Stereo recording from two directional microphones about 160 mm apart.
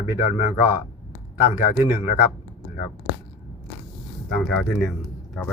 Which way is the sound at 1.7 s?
15° right (ahead or behind).